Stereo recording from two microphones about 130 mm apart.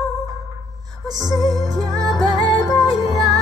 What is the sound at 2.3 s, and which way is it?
Music, 30° left (ahead or behind).